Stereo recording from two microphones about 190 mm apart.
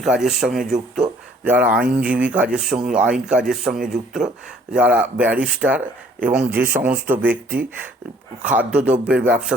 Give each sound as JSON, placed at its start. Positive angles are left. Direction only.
{"t": 0.0, "sound": "speech", "side_deg": -5}
{"t": 8.4, "sound": "speech", "side_deg": -10}